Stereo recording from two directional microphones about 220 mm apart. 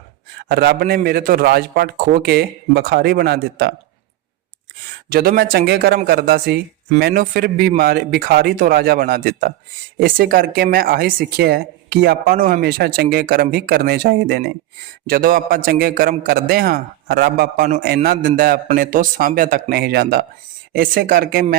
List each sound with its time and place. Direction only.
0.4 s speech: 45° right (ahead or behind)
5.0 s speech: 45° right (ahead or behind)